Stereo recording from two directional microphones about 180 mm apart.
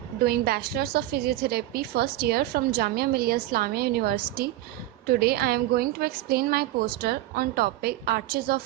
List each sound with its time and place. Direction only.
0.3 s a woman's voice: 60° right (ahead or behind)